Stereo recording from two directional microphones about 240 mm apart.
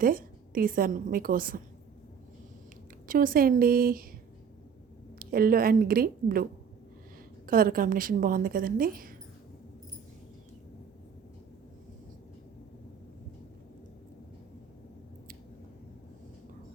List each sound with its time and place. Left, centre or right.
0.0 s a woman's voice: right
3.1 s a woman's voice: right
5.2 s a woman's voice: right
7.4 s a woman's voice: right